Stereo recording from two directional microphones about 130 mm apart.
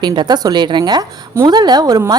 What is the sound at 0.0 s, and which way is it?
A woman's voice, 35° right (ahead or behind).